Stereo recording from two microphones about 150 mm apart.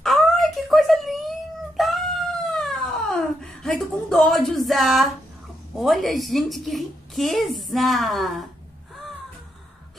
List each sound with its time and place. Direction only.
0.0 s wail: centre (ahead or behind)
1.8 s cat: centre (ahead or behind)
5.8 s a woman's voice: centre (ahead or behind)